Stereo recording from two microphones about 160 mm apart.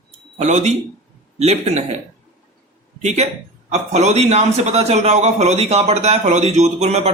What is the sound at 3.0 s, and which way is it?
A man's voice, 45° right (ahead or behind).